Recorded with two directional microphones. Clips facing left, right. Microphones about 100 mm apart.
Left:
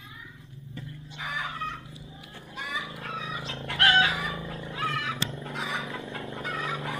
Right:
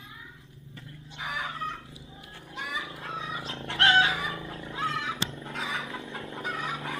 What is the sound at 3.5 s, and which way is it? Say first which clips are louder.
Chicken: even; 30° right (ahead or behind).